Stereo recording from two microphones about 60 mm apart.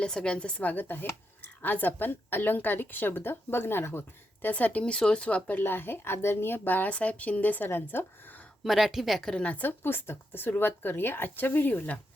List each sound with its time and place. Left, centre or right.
0.0 s a woman's voice: centre; by 4.0 s left
4.4 s speech: left
5.5 s a woman's voice: left
8.6 s speech: centre
9.3 s speech: left
9.6 s a woman's voice: left